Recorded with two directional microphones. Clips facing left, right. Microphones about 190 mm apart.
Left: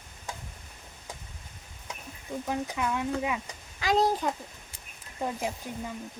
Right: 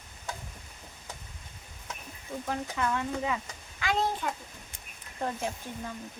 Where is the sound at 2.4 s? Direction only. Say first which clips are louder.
Left 1 dB; 15° left (ahead or behind).